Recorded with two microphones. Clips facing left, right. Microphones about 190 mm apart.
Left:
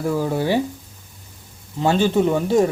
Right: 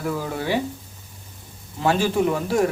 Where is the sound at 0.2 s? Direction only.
30° left (ahead or behind).